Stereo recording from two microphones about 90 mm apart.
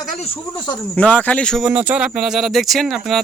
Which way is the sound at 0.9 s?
15° left (ahead or behind).